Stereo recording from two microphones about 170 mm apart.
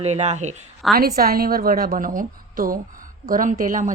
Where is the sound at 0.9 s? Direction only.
60° right (ahead or behind).